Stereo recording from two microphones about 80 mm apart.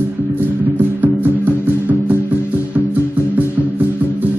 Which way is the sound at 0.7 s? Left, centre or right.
Right.